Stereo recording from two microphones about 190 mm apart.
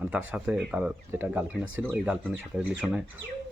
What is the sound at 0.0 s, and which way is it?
Speech, 10° right (ahead or behind).